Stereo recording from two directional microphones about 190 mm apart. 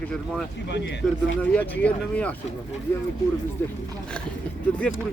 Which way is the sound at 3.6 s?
10° left (ahead or behind).